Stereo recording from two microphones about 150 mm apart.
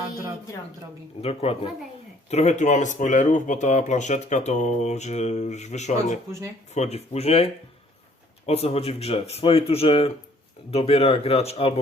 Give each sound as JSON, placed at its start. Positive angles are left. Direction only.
{"t": 1.2, "sound": "speech", "side_deg": 45}